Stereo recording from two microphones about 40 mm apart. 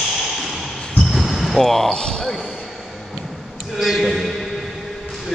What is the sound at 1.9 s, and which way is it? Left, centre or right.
Basketball bounce, centre.